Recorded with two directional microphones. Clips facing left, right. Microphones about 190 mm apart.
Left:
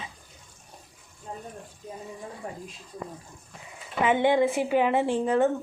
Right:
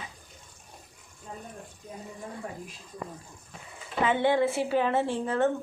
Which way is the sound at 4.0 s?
15° left (ahead or behind).